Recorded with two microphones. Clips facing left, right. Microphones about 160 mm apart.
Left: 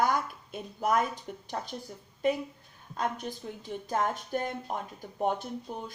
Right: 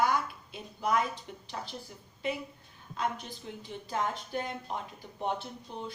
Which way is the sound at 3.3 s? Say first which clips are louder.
Left 5 dB; 50° left (ahead or behind).